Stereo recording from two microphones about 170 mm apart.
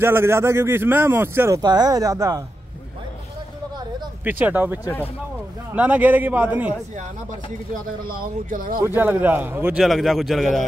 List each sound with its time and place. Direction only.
0.0 s speech: 15° right (ahead or behind)
4.2 s speech: 10° right (ahead or behind)
7.7 s speech: 55° right (ahead or behind)
8.8 s speech: 10° right (ahead or behind)